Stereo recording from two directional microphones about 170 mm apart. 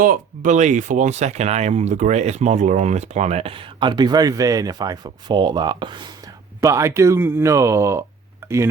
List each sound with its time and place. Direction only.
0.0 s speech: 50° right (ahead or behind); by 8.0 s 15° right (ahead or behind)
8.4 s wind chime: 15° right (ahead or behind)